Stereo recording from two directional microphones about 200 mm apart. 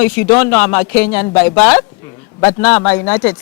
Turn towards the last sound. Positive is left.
turn(degrees=10)  # may be behind; listen again after turning